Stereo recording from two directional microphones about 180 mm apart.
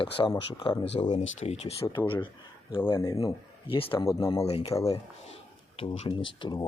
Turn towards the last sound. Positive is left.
turn(degrees=25)  # may be behind; listen again after turning